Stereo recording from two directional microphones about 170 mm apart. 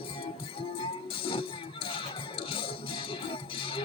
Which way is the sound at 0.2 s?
30° left (ahead or behind).